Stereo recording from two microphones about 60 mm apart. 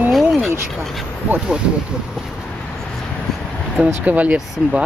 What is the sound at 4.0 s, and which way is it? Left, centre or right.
Speech, right.